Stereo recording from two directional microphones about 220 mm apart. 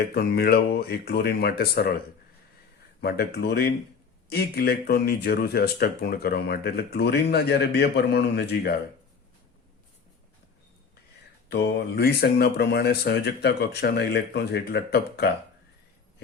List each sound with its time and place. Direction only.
0.1 s speech: 45° left (ahead or behind)
3.0 s speech: 45° left (ahead or behind)
11.4 s speech: 45° left (ahead or behind)